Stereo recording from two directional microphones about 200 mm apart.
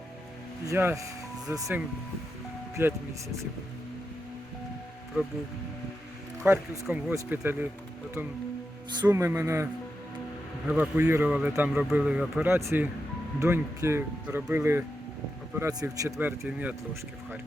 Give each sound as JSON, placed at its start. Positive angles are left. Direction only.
{"t": 0.6, "sound": "speech", "side_deg": -15}
{"t": 5.2, "sound": "speech", "side_deg": -10}
{"t": 6.4, "sound": "speech", "side_deg": -10}
{"t": 9.0, "sound": "speech", "side_deg": -10}
{"t": 10.7, "sound": "speech", "side_deg": -5}